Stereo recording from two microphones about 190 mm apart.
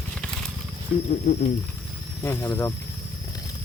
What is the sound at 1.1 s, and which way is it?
Speech, 40° left (ahead or behind).